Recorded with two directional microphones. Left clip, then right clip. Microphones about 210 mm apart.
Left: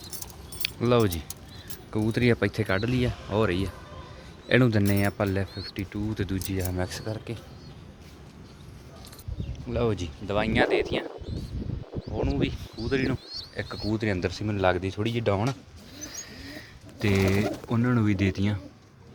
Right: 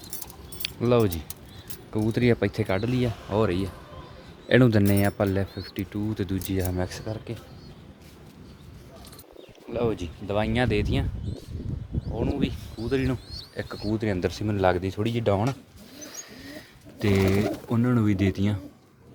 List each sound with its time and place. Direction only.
0.6 s speech: centre (ahead or behind)
4.4 s speech: 10° right (ahead or behind)
6.5 s speech: 20° right (ahead or behind)
6.7 s speech: centre (ahead or behind)
9.7 s speech: centre (ahead or behind)
12.2 s speech: 5° right (ahead or behind)
12.8 s a sound: 15° right (ahead or behind)
13.6 s speech: 10° right (ahead or behind)
14.2 s speech: 15° right (ahead or behind)
16.0 s pigeon: 10° right (ahead or behind)